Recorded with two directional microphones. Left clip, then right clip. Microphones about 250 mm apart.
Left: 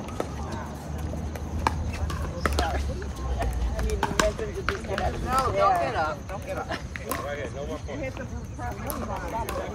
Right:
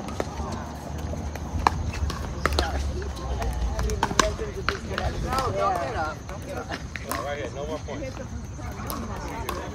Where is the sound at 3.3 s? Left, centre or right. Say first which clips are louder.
Left 2 dB; right.